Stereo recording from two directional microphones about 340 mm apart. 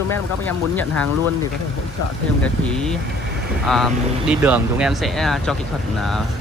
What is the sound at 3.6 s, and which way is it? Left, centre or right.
Speech, centre.